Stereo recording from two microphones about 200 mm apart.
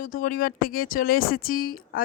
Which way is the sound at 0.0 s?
45° left (ahead or behind).